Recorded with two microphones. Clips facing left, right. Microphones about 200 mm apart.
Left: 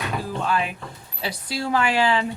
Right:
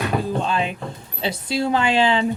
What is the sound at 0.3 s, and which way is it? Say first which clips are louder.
Speech: right 2 dB; 25° right (ahead or behind).